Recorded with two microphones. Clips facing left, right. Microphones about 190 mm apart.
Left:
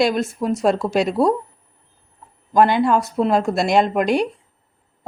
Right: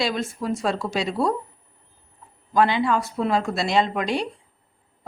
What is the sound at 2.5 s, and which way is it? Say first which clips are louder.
A woman's voice: left 5 dB; 50° left (ahead or behind).